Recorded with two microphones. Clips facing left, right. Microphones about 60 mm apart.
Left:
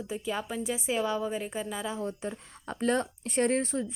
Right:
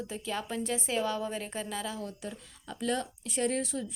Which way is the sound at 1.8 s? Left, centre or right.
Left.